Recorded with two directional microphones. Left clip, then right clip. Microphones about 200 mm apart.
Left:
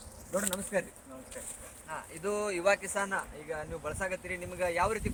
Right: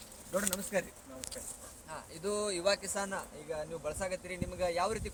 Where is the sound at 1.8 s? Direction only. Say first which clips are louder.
Left 3 dB; 5° left (ahead or behind).